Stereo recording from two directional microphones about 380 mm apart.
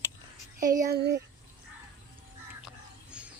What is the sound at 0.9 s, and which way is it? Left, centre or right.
Speech, right.